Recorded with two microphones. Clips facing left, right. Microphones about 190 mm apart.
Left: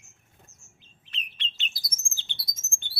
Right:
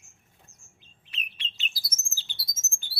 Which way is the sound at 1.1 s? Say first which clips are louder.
Left 1 dB; 10° right (ahead or behind).